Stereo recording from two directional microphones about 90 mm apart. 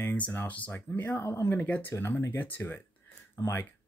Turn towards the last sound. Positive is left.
turn(degrees=30)  # may be behind; listen again after turning